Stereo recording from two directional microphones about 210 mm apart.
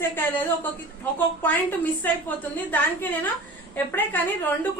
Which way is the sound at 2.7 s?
10° left (ahead or behind).